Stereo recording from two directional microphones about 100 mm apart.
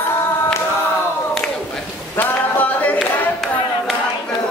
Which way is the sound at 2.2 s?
15° left (ahead or behind).